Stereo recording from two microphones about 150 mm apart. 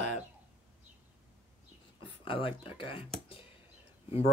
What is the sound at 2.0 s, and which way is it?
Speech, 35° left (ahead or behind).